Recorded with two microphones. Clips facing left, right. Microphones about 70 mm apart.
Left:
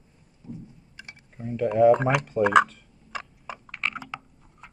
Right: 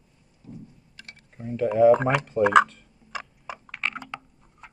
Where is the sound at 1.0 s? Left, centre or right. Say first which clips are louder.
Left 2 dB; centre.